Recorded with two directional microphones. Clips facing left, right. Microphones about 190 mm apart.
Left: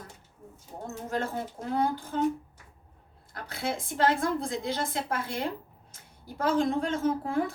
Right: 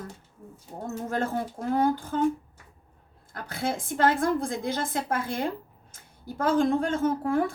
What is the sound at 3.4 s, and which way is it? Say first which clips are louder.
A woman's voice: right 3 dB; 50° right (ahead or behind).